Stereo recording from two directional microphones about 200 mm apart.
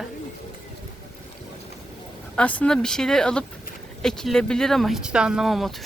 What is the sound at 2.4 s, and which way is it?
Speech, 5° left (ahead or behind).